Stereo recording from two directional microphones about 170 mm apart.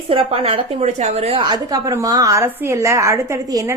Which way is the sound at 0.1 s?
35° right (ahead or behind).